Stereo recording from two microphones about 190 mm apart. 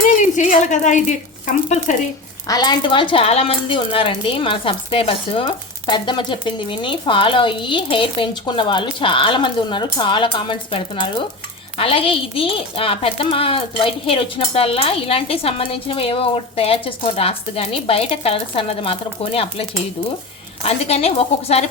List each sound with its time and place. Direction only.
0.2 s a woman's voice: 40° left (ahead or behind)
2.5 s speech: 20° left (ahead or behind)
20.7 s a woman's voice: 35° left (ahead or behind)